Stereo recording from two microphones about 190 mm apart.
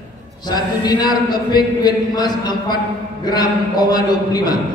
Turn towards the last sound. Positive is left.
turn(degrees=20)  # may be behind; listen again after turning